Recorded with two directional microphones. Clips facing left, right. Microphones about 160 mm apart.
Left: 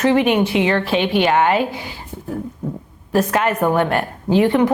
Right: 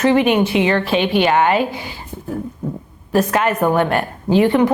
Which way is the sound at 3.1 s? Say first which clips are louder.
Right 1 dB; 15° right (ahead or behind).